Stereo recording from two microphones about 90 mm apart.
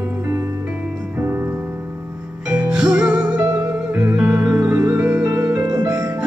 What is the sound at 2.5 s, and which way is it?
Music, 10° right (ahead or behind).